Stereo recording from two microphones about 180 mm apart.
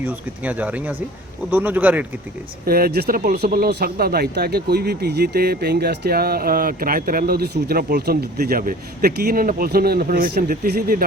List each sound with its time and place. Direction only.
0.0 s speech: 10° right (ahead or behind)
2.6 s speech: 55° right (ahead or behind)